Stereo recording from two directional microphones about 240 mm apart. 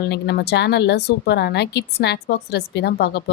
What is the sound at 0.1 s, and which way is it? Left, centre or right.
A woman's voice, left.